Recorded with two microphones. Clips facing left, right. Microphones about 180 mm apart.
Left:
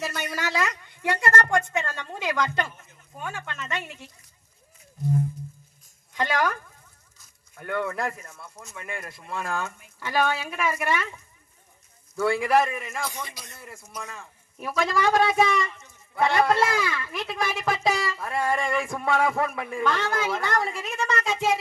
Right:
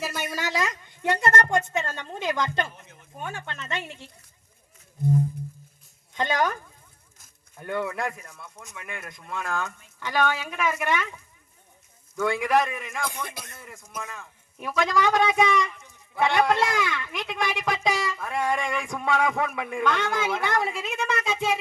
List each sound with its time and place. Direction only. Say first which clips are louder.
0.0 s a woman's voice: even; 5° right (ahead or behind)
0.3 s a woman's voice: left 1 dB; 15° right (ahead or behind)
6.1 s a woman's voice: even; 20° right (ahead or behind)
7.9 s speech: left 1 dB; centre (ahead or behind)
12.1 s speech: left 1 dB; 5° left (ahead or behind)
13.1 s a man's voice: right 2 dB; 55° right (ahead or behind)
13.6 s a man's voice: left 1 dB; 5° left (ahead or behind)